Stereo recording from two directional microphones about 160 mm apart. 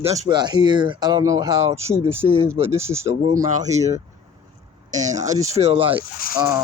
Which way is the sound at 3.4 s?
50° right (ahead or behind).